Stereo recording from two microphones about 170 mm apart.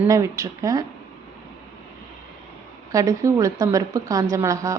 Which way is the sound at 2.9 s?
20° right (ahead or behind).